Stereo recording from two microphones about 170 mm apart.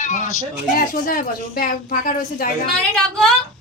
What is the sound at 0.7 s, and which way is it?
A woman's voice, 55° left (ahead or behind).